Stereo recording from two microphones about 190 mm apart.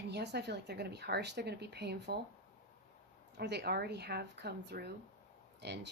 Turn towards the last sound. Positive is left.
turn(degrees=-60)  # may be behind; listen again after turning